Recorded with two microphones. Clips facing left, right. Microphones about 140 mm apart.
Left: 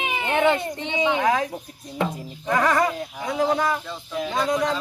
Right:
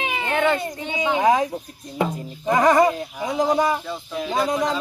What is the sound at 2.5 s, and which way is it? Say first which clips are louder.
Speech: right 5 dB; 20° right (ahead or behind).